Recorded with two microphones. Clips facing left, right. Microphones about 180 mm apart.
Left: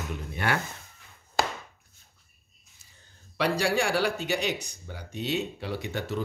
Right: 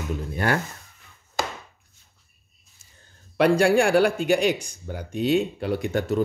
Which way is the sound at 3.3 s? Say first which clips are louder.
Right 8 dB; 55° right (ahead or behind).